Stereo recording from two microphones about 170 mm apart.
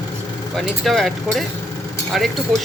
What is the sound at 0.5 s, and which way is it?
Speech, centre (ahead or behind).